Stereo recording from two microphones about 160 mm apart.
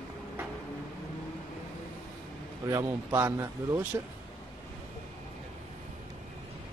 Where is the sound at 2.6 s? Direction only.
15° right (ahead or behind).